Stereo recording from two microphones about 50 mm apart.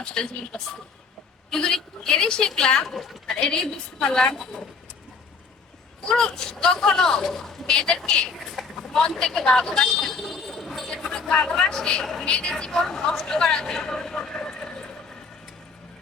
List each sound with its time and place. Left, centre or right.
0.0 s speech: centre
1.5 s speech: centre
2.8 s a woman's voice: centre
3.5 s speech: centre
6.1 s speech: centre
8.5 s a sound: centre
9.0 s speech: centre
11.0 s a sound: centre
11.5 s speech: centre